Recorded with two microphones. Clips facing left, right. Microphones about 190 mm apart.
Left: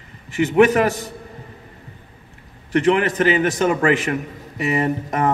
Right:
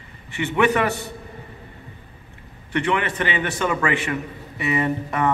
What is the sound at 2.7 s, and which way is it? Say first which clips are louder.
A man's voice: left 6 dB; 40° left (ahead or behind).